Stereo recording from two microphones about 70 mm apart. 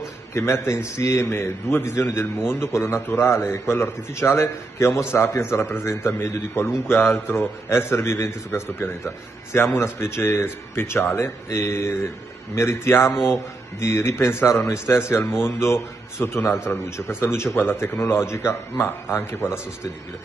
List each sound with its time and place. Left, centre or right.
0.3 s a man's voice: left